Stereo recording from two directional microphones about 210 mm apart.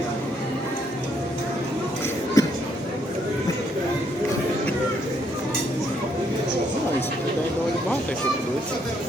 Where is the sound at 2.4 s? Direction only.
15° left (ahead or behind).